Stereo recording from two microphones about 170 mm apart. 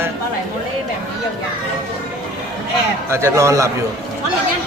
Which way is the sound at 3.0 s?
15° right (ahead or behind).